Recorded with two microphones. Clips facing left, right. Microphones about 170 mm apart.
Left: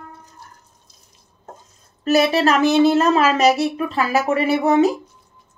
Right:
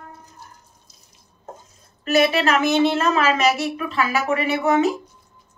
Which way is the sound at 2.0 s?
35° left (ahead or behind).